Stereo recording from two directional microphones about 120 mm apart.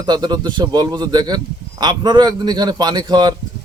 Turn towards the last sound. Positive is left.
turn(degrees=-35)  # may be behind; listen again after turning